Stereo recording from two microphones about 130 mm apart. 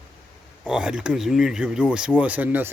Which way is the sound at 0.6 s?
5° right (ahead or behind).